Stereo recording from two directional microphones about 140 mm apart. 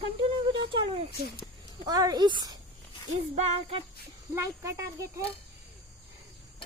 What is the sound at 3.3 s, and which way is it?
Music, 50° right (ahead or behind).